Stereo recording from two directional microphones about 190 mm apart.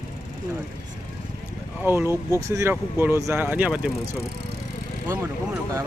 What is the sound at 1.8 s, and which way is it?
Speech, 10° right (ahead or behind).